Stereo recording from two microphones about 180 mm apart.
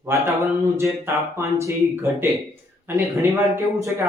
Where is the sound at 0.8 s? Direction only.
15° right (ahead or behind).